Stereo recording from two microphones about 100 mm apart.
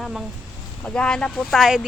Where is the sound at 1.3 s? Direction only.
5° right (ahead or behind).